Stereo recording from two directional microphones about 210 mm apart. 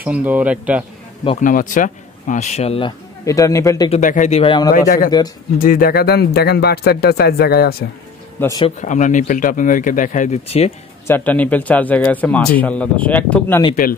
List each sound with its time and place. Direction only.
0.0 s speech: 10° right (ahead or behind)
1.2 s speech: 35° left (ahead or behind)
3.3 s speech: 15° left (ahead or behind)
4.0 s speech: 35° left (ahead or behind)
4.7 s speech: 40° left (ahead or behind)
8.4 s speech: 15° left (ahead or behind)
8.6 s speech: 35° left (ahead or behind)
11.1 s speech: 10° left (ahead or behind)